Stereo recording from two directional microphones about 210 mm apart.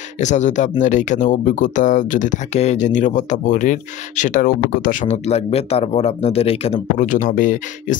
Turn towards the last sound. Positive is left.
turn(degrees=40)  # may be behind; listen again after turning